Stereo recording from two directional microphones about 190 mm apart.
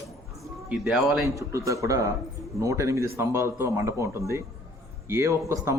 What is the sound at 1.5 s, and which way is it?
Speech, 15° right (ahead or behind).